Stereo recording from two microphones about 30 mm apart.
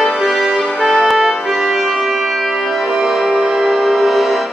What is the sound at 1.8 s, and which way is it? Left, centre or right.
Music, centre.